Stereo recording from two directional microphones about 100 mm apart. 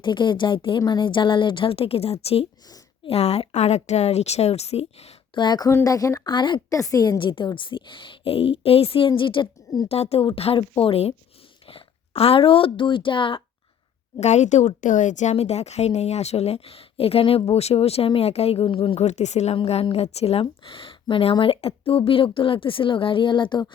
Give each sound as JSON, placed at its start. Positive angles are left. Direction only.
{"t": 0.0, "sound": "a woman's voice", "side_deg": 50}
{"t": 0.8, "sound": "a woman's voice", "side_deg": 45}
{"t": 5.3, "sound": "a woman's voice", "side_deg": 50}
{"t": 5.6, "sound": "speech", "side_deg": 35}
{"t": 6.2, "sound": "a woman's voice", "side_deg": 50}
{"t": 6.7, "sound": "speech", "side_deg": 35}
{"t": 7.2, "sound": "speech", "side_deg": 55}
{"t": 9.9, "sound": "a woman's voice", "side_deg": 90}
{"t": 10.2, "sound": "a woman's voice", "side_deg": 70}
{"t": 15.3, "sound": "a woman's voice", "side_deg": 90}
{"t": 17.5, "sound": "speech", "side_deg": 90}